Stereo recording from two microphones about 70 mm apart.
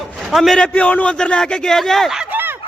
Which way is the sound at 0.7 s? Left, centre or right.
Left.